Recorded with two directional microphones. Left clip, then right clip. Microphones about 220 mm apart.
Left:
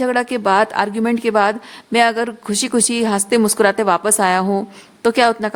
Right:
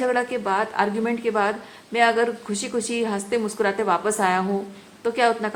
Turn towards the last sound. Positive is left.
turn(degrees=55)  # may be behind; listen again after turning